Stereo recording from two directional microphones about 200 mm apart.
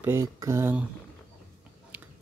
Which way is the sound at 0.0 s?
15° right (ahead or behind).